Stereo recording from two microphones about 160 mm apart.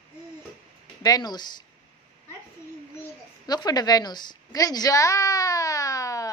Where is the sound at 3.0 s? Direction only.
25° left (ahead or behind).